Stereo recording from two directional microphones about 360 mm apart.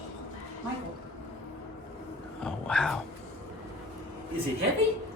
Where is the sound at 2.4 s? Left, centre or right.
Centre.